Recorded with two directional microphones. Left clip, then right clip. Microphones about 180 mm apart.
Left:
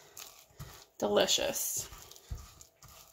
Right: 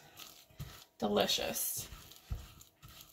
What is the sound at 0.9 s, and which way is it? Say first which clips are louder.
Speech: left 4 dB; 45° left (ahead or behind).